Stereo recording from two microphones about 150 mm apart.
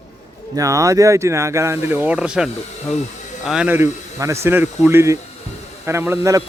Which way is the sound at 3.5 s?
10° right (ahead or behind).